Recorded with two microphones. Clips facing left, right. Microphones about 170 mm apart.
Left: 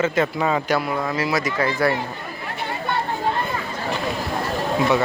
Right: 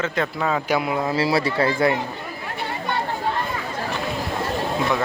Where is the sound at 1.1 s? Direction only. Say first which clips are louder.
Right 4 dB; 30° right (ahead or behind).